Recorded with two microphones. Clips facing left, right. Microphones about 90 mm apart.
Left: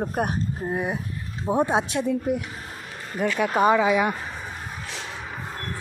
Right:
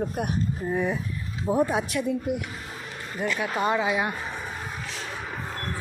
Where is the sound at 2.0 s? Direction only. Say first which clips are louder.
Left 3 dB; 40° left (ahead or behind).